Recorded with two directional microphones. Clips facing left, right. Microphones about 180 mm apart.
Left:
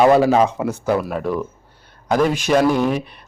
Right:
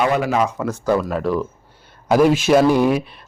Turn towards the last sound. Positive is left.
turn(degrees=-10)  # may be behind; listen again after turning